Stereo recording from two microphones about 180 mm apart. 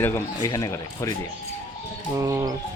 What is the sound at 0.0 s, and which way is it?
Speech, 15° left (ahead or behind).